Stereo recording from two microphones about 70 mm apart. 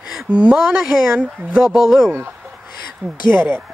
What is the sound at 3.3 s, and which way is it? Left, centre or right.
Speech, right.